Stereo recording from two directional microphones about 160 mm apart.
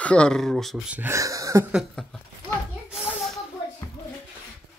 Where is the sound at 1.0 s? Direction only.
20° right (ahead or behind).